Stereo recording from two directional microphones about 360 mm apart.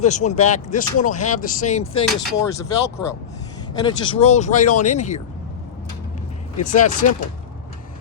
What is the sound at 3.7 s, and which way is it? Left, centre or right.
Speech, centre.